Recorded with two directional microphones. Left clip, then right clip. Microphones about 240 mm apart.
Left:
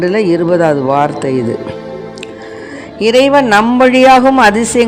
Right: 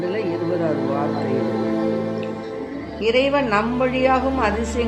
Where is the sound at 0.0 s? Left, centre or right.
Left.